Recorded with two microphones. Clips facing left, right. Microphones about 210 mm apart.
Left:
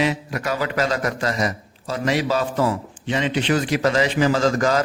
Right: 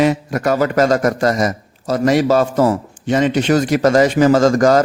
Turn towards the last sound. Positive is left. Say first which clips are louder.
# right 7 dB
turn(degrees=-45)  # may be behind; listen again after turning